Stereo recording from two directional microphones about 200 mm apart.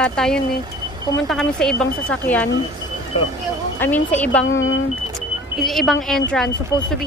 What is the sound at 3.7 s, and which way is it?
Speech, 10° left (ahead or behind).